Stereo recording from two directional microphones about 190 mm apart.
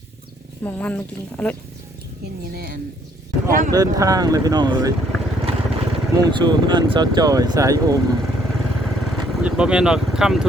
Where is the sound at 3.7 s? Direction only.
20° right (ahead or behind).